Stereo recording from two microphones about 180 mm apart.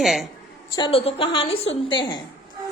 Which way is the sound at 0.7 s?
30° left (ahead or behind).